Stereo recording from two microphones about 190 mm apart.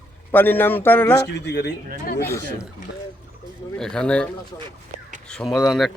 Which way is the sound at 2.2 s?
15° left (ahead or behind).